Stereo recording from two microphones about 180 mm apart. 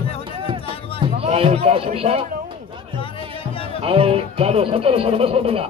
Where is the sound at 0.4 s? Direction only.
30° right (ahead or behind).